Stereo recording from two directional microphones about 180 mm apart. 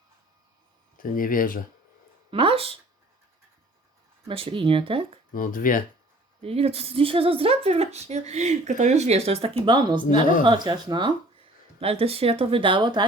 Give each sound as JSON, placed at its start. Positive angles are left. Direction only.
{"t": 0.9, "sound": "speech", "side_deg": 50}
{"t": 2.3, "sound": "speech", "side_deg": -30}
{"t": 4.3, "sound": "speech", "side_deg": -30}
{"t": 5.3, "sound": "speech", "side_deg": 50}
{"t": 6.4, "sound": "speech", "side_deg": -35}